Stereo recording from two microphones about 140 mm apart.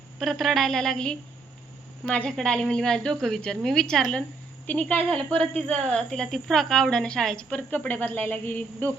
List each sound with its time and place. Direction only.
0.2 s a woman's voice: centre (ahead or behind)